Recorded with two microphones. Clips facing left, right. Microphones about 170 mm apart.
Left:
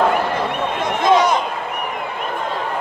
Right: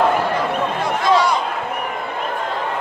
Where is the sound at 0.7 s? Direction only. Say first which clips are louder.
Left 3 dB; 20° left (ahead or behind).